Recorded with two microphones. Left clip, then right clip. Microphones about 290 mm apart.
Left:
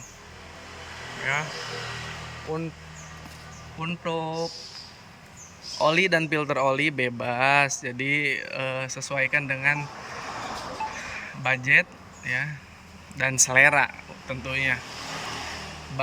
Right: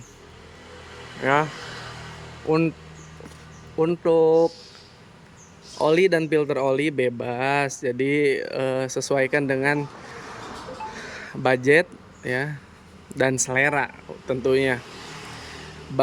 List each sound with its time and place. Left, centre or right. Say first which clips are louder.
1.2 s speech: right 7 dB; centre
3.8 s speech: right 11 dB; centre
5.7 s speech: right 2 dB; centre
10.9 s a sound: even; centre
13.1 s speech: left 1 dB; centre